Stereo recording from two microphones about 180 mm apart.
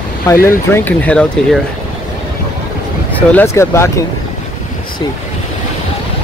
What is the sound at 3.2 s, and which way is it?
Speech, 10° left (ahead or behind).